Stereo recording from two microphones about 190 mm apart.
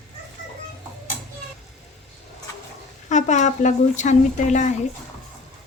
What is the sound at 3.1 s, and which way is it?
Speech, 40° left (ahead or behind).